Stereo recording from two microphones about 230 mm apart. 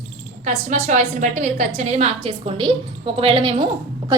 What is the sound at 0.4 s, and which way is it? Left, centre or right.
A woman's voice, right.